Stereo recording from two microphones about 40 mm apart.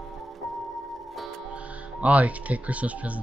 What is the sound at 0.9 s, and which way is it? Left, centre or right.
Tick-tock, centre.